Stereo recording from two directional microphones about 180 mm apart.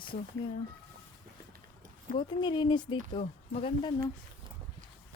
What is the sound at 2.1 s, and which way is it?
Speech, 25° left (ahead or behind).